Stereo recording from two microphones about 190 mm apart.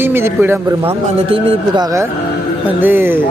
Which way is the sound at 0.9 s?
30° right (ahead or behind).